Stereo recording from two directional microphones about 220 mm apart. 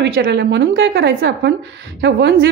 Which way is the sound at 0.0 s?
50° right (ahead or behind).